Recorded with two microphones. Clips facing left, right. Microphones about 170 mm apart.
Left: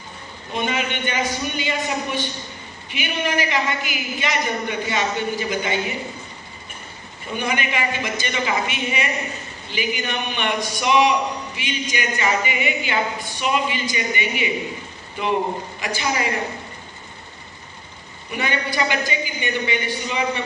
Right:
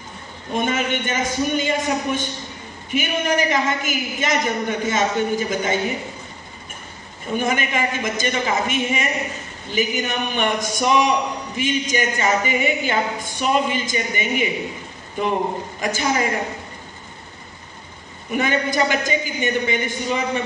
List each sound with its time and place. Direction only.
0.5 s a man's voice: 45° right (ahead or behind)
7.3 s a man's voice: 45° right (ahead or behind)
15.8 s a man's voice: 45° right (ahead or behind)
18.3 s a man's voice: 45° right (ahead or behind)